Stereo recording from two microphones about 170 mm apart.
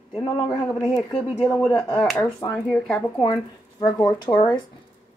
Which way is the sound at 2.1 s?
20° left (ahead or behind).